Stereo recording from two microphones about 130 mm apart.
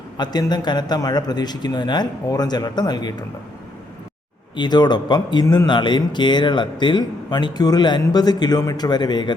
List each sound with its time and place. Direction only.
0.2 s speech: 30° left (ahead or behind)
4.5 s speech: 35° left (ahead or behind)